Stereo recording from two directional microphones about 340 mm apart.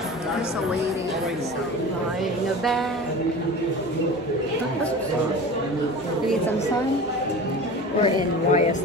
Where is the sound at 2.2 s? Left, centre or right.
Centre.